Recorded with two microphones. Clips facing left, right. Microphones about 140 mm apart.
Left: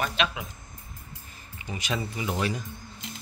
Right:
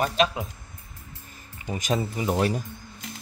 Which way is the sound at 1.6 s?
40° right (ahead or behind).